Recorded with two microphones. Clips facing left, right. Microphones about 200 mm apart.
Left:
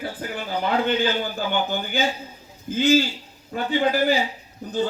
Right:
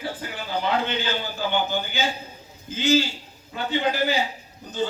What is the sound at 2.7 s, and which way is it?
A man's voice, 55° left (ahead or behind).